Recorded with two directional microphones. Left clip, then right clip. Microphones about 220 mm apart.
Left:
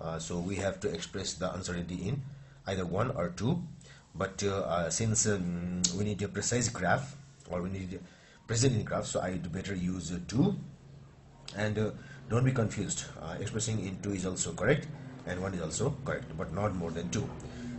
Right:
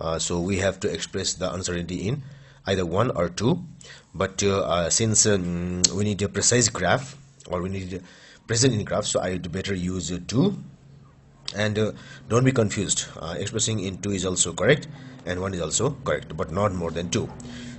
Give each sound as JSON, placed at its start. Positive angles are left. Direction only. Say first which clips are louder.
{"t": 0.0, "sound": "speech", "louder": "right 11 dB", "side_deg": -40}
{"t": 11.4, "sound": "speech", "louder": "right 9 dB", "side_deg": -40}